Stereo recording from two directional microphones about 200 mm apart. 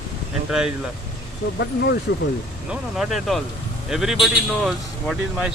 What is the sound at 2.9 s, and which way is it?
Speech, centre (ahead or behind).